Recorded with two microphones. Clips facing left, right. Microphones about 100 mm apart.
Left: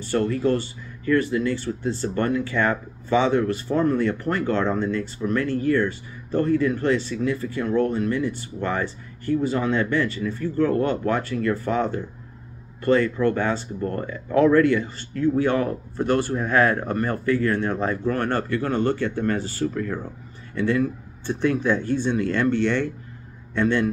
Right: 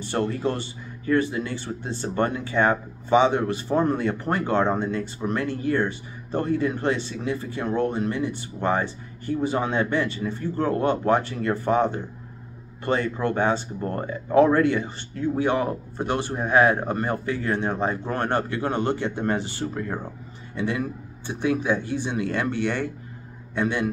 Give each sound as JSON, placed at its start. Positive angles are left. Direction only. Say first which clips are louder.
{"t": 0.0, "sound": "speech", "louder": "left 3 dB", "side_deg": -20}